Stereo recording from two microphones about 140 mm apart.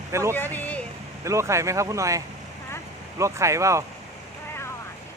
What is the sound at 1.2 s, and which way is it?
Speech, 20° right (ahead or behind).